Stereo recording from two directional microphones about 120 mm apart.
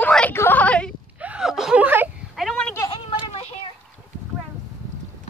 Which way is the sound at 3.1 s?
55° left (ahead or behind).